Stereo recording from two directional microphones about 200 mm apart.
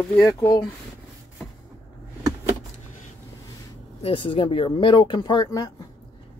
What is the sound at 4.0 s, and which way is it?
Speech, 25° left (ahead or behind).